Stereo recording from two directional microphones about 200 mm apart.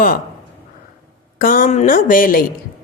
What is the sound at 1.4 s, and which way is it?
A woman's voice, 45° left (ahead or behind).